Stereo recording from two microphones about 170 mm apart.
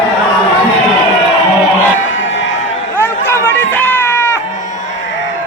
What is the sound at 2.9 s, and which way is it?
Chatter, 10° left (ahead or behind).